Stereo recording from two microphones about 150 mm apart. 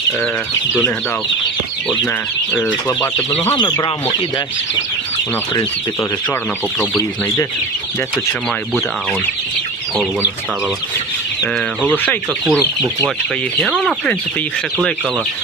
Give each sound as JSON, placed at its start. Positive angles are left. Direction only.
{"t": 1.9, "sound": "speech", "side_deg": 10}
{"t": 3.5, "sound": "speech", "side_deg": 30}
{"t": 6.7, "sound": "speech", "side_deg": 15}
{"t": 11.9, "sound": "speech", "side_deg": 10}
{"t": 13.6, "sound": "speech", "side_deg": 0}